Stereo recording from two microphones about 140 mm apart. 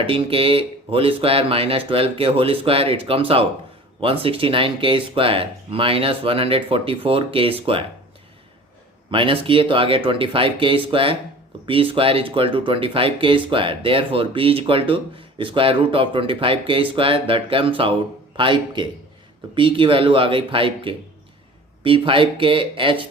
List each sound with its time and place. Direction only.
0.0 s speech: 40° right (ahead or behind)
9.0 s speech: 40° right (ahead or behind)